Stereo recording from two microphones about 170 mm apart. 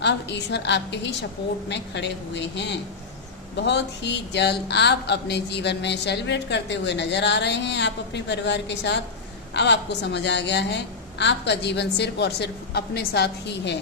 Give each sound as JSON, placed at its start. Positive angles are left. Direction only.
{"t": 0.0, "sound": "speech", "side_deg": 90}